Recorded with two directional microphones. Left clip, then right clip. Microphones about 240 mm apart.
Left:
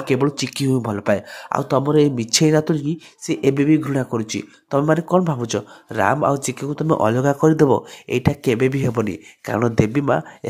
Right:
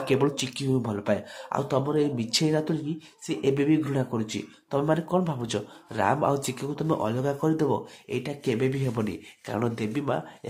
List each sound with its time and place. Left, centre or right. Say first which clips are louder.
0.0 s speech: left 5 dB; centre